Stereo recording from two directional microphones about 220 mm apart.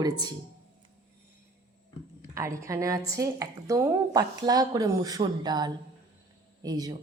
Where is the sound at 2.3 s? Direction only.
15° right (ahead or behind).